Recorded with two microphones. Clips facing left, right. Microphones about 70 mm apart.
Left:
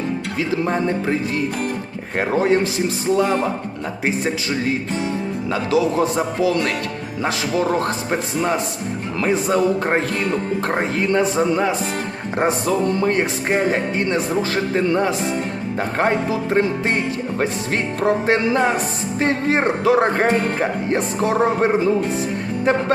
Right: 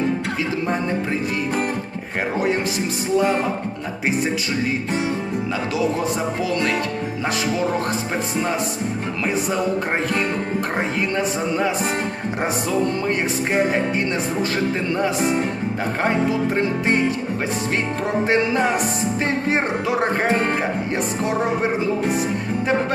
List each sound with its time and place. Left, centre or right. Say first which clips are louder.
5.7 s music: left 5 dB; left
11.1 s music: left 5 dB; left
12.6 s speech: left 2 dB; left
16.0 s music: left 1 dB; left
18.0 s speech: left 3 dB; left
19.5 s music: left 4 dB; left
20.9 s speech: left 3 dB; left